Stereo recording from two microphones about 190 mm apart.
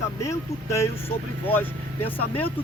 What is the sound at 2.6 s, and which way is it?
Speech, 30° left (ahead or behind).